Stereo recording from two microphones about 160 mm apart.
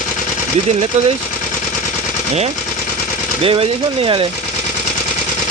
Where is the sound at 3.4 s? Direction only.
35° right (ahead or behind).